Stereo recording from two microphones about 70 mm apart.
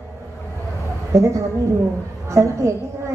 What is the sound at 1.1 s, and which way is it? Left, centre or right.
A woman's voice, right.